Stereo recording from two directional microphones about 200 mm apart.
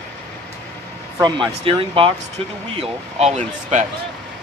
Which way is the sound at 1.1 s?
20° right (ahead or behind).